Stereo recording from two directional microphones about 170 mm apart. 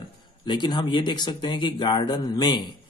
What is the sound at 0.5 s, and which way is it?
Speech, 25° left (ahead or behind).